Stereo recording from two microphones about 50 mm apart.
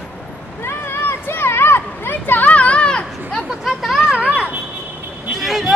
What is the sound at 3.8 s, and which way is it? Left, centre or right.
Children playing, centre.